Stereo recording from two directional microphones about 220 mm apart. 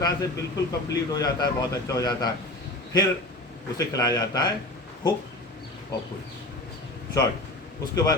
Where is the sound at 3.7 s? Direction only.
15° left (ahead or behind).